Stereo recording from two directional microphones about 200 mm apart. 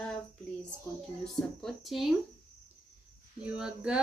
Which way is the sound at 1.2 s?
Centre (ahead or behind).